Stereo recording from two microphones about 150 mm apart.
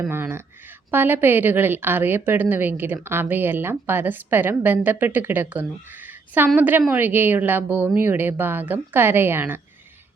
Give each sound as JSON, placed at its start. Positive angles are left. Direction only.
{"t": 0.1, "sound": "a woman's voice", "side_deg": -15}